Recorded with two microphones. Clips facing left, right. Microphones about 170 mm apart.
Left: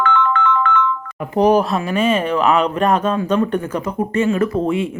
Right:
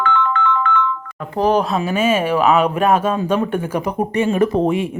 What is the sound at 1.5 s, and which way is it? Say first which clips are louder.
Speech: left 1 dB; centre (ahead or behind).